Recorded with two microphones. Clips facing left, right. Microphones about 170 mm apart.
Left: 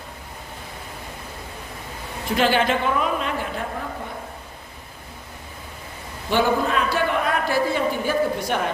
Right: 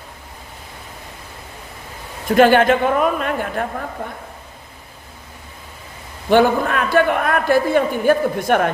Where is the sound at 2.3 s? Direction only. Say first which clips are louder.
Right 8 dB; 50° right (ahead or behind).